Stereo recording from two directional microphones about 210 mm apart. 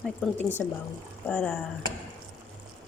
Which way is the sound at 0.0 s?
10° left (ahead or behind).